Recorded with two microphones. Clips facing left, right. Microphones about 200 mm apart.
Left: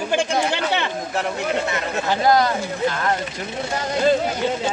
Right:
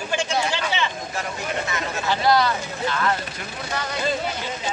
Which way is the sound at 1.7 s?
45° left (ahead or behind).